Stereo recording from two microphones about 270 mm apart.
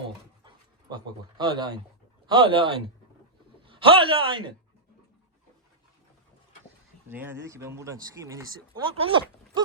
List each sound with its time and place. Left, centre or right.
0.4 s a man's voice: centre
7.1 s speech: centre